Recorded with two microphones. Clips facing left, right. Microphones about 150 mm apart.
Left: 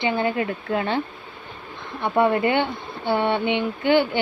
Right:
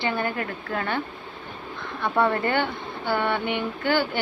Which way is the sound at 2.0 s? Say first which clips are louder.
Left 3 dB; 20° left (ahead or behind).